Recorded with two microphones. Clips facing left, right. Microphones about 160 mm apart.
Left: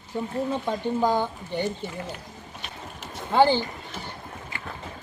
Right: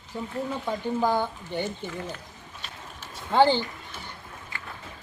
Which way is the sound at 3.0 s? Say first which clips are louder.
Left 1 dB; 15° left (ahead or behind).